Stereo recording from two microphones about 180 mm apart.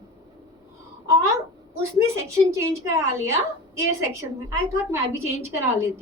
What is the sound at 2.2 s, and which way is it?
A woman's voice, 15° right (ahead or behind).